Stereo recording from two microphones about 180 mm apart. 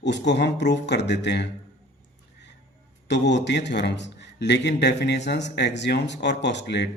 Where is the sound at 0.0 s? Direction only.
75° left (ahead or behind).